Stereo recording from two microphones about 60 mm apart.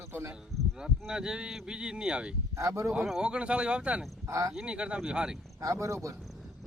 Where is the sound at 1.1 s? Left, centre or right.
Centre.